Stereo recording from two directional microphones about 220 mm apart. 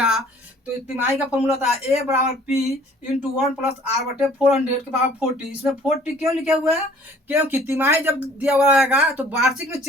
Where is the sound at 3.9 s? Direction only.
15° right (ahead or behind).